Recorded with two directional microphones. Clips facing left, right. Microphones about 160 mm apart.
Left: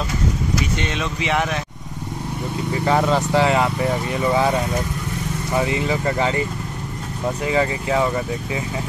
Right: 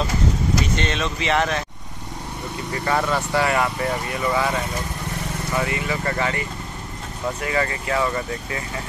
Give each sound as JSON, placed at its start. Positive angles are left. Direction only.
{"t": 0.7, "sound": "speech", "side_deg": 15}
{"t": 2.7, "sound": "speech", "side_deg": 10}
{"t": 5.6, "sound": "speech", "side_deg": 15}
{"t": 7.4, "sound": "speech", "side_deg": 15}